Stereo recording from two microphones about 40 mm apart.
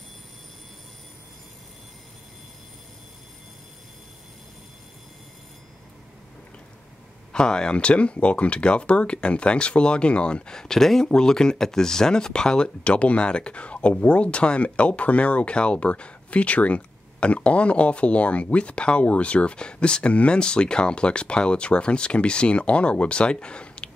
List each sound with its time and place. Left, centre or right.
7.3 s speech: left
12.6 s speech: left